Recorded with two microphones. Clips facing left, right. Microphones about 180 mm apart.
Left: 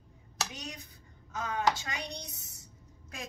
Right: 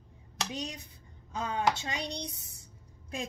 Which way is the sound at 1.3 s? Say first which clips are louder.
Right 1 dB; 30° right (ahead or behind).